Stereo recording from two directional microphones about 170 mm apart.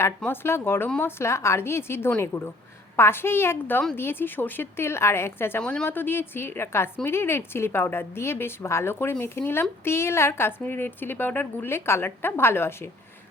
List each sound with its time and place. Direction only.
0.0 s a woman's voice: 15° left (ahead or behind)